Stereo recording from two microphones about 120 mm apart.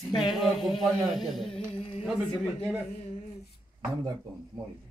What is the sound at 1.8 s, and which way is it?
Speech, 65° left (ahead or behind).